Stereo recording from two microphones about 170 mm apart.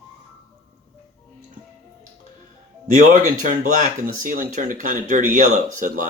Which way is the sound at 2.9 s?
50° right (ahead or behind).